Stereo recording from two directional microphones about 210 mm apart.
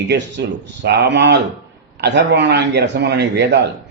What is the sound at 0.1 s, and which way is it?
A man's voice, 55° right (ahead or behind).